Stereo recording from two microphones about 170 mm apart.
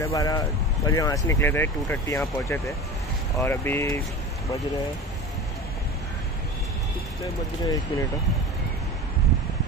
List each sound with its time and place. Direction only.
0.0 s speech: 20° left (ahead or behind)
7.6 s speech: 20° left (ahead or behind)